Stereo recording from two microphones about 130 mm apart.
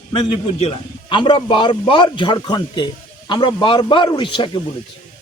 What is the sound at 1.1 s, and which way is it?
A man's voice, 40° left (ahead or behind).